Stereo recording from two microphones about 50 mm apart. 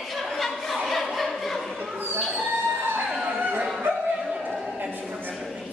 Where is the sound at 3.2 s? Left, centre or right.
Right.